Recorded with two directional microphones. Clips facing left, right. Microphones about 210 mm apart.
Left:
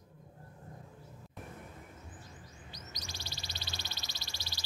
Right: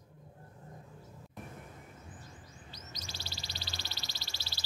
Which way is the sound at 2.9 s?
15° left (ahead or behind).